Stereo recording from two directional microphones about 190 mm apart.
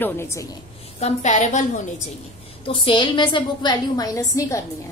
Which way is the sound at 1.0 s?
40° left (ahead or behind).